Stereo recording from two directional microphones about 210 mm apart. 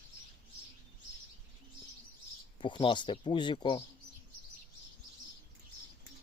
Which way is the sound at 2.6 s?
20° left (ahead or behind).